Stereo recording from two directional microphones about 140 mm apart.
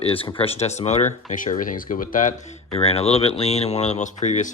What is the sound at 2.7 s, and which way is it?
Speech, 45° left (ahead or behind).